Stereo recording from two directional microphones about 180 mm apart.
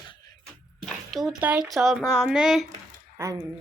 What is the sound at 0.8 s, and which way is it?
A woman's voice, centre (ahead or behind).